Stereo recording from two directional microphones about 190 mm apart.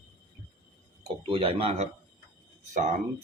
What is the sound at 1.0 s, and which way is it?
Speech, 30° right (ahead or behind).